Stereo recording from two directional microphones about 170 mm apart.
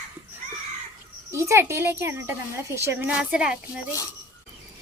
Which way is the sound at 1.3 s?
15° right (ahead or behind).